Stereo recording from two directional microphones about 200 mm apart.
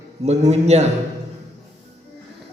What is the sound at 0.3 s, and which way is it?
Speech, 35° right (ahead or behind).